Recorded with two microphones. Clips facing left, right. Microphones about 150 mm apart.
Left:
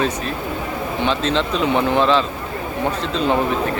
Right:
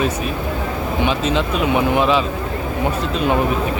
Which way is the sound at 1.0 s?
10° right (ahead or behind).